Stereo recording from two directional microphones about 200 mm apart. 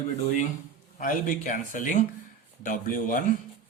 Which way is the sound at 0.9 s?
45° left (ahead or behind).